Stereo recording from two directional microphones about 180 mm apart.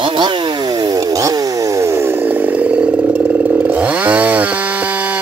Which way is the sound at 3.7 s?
10° right (ahead or behind).